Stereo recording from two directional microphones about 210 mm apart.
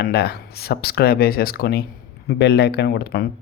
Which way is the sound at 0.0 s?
50° left (ahead or behind).